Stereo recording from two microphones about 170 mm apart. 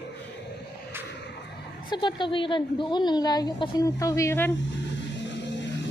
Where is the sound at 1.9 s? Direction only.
30° left (ahead or behind).